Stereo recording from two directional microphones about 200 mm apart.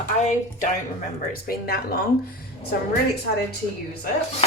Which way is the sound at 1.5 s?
50° left (ahead or behind).